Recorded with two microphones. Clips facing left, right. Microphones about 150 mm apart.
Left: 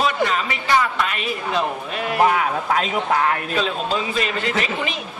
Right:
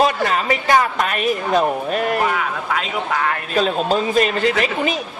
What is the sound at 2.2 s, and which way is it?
Speech, 45° left (ahead or behind).